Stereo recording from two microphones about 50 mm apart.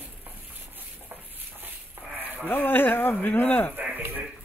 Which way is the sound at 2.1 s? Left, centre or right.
Right.